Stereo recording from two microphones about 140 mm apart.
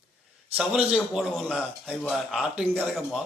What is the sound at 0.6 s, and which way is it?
A man's voice, 5° right (ahead or behind).